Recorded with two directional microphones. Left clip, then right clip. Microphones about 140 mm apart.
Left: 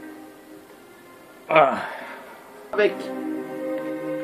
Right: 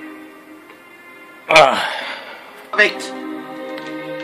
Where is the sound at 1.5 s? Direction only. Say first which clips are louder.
Right 7 dB; 50° right (ahead or behind).